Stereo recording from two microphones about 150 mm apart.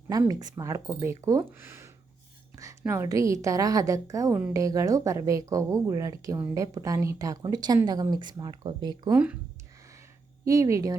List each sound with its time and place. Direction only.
0.1 s a woman's voice: 25° right (ahead or behind)
9.1 s speech: 10° right (ahead or behind)
10.4 s a woman's voice: 20° right (ahead or behind)